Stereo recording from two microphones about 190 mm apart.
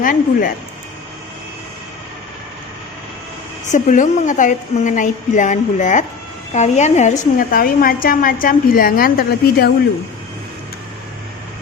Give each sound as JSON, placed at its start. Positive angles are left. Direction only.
{"t": 0.0, "sound": "a woman's voice", "side_deg": 45}
{"t": 3.7, "sound": "a woman's voice", "side_deg": 40}